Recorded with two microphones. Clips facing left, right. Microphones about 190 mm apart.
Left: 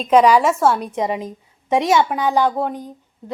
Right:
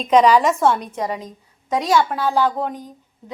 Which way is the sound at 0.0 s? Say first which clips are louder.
Left 1 dB; 5° left (ahead or behind).